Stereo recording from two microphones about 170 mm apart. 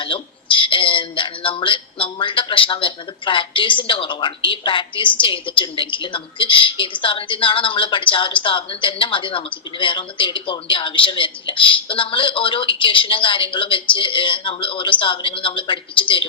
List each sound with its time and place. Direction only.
0.0 s a woman's voice: 30° left (ahead or behind)